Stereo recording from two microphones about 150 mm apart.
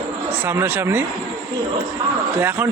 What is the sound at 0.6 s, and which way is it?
Speech, 15° right (ahead or behind).